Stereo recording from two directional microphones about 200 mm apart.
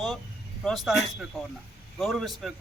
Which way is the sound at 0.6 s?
Centre (ahead or behind).